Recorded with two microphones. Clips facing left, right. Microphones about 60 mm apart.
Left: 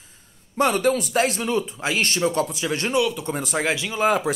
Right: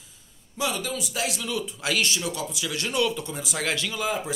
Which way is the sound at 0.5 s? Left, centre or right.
Left.